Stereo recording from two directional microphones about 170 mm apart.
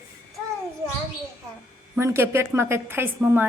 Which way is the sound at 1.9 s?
15° right (ahead or behind).